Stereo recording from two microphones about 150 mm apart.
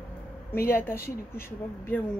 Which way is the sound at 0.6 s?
15° left (ahead or behind).